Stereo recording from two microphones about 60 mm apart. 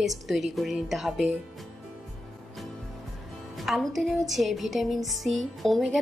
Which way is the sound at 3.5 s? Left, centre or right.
Centre.